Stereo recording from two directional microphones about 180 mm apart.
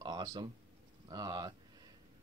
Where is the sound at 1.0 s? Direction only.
20° right (ahead or behind).